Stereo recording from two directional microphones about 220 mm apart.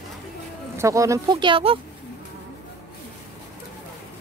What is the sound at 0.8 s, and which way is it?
Speech, 15° right (ahead or behind).